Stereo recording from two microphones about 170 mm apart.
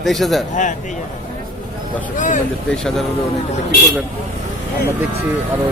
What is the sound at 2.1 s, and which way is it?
Speech, 50° left (ahead or behind).